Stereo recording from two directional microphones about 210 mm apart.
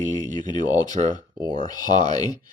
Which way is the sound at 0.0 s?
35° right (ahead or behind).